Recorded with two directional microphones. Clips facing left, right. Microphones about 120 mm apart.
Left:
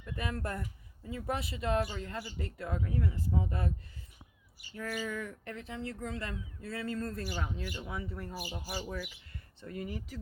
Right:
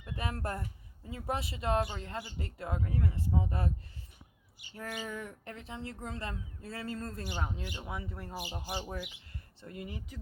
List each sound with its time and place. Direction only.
0.0 s speech: 30° right (ahead or behind)
4.7 s speech: 25° right (ahead or behind)